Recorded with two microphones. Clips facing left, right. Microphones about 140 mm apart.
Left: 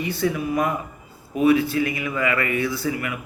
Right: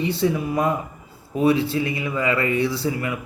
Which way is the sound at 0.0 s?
30° right (ahead or behind).